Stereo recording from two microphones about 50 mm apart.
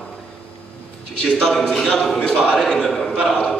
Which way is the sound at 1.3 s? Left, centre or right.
Centre.